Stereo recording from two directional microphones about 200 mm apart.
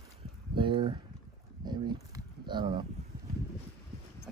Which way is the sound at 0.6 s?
25° right (ahead or behind).